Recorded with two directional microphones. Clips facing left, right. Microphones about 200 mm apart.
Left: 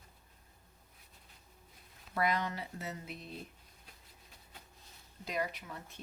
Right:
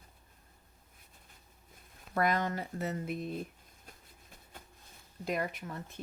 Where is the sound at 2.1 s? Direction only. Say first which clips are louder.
Right 3 dB; 50° right (ahead or behind).